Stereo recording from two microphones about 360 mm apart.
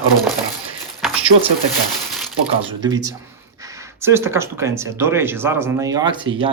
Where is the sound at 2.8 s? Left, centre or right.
Centre.